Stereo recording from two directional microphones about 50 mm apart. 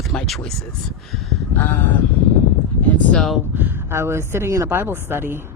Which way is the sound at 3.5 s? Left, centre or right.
Right.